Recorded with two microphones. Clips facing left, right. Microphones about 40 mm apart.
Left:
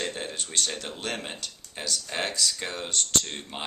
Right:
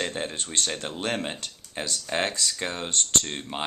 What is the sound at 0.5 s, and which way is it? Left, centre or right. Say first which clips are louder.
Speech: right 1 dB; right.